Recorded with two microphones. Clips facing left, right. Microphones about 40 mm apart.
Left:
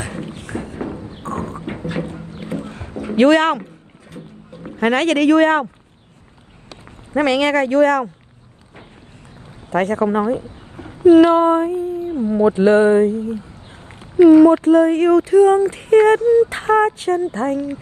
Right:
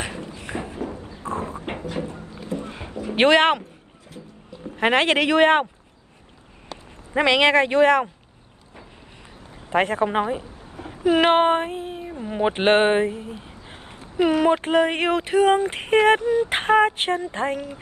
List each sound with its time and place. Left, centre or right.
0.1 s a sound: left
0.7 s horse: left
1.8 s a sound: left
3.2 s speech: right
4.1 s boat: left
4.7 s speech: right
7.2 s speech: right
9.7 s a woman's voice: right
13.3 s a sound: right
14.4 s a woman's voice: right